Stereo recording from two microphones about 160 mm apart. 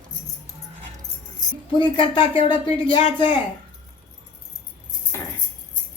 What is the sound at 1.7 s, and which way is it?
A man's voice, 30° left (ahead or behind).